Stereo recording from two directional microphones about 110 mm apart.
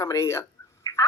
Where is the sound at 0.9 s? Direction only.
35° left (ahead or behind).